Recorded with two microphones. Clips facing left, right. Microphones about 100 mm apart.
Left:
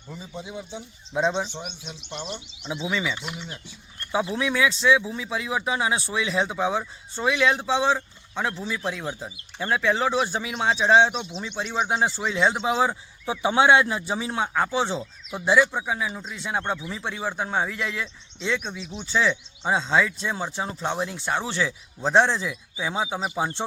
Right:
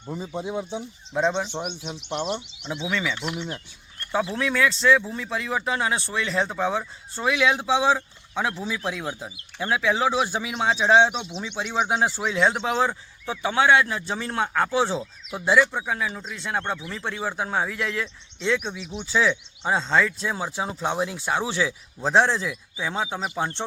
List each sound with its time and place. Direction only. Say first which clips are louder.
0.1 s speech: right 7 dB; 55° right (ahead or behind)
1.1 s speech: right 1 dB; centre (ahead or behind)
1.5 s speech: right 6 dB; 60° right (ahead or behind)
2.9 s speech: right 3 dB; 5° left (ahead or behind)